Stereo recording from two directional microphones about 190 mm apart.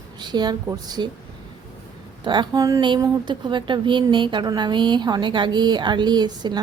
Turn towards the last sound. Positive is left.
turn(degrees=-20)  # may be behind; listen again after turning